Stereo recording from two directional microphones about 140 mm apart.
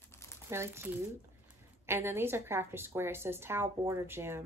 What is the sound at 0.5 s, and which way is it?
A woman's voice, 15° right (ahead or behind).